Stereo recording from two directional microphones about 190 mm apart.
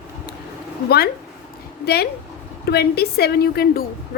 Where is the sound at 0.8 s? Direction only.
55° left (ahead or behind).